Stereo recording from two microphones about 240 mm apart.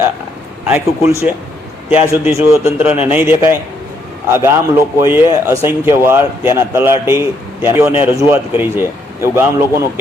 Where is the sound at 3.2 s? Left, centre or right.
Centre.